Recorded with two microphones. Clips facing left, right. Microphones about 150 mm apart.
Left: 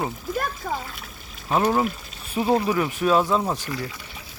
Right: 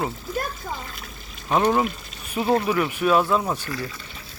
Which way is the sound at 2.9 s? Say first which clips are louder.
Even; 35° left (ahead or behind).